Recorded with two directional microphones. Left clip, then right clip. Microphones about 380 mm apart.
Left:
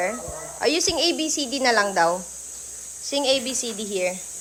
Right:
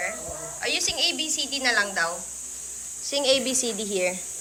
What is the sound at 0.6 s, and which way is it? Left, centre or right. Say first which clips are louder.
A woman's voice: left 4 dB; centre.